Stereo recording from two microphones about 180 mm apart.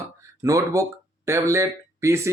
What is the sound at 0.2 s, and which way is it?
Speech, 15° right (ahead or behind).